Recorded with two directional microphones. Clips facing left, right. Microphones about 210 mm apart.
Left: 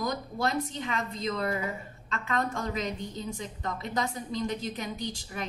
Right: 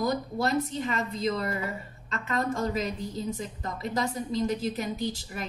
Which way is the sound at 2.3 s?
Centre (ahead or behind).